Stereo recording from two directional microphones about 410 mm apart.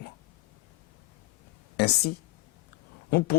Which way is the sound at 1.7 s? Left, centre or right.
Left.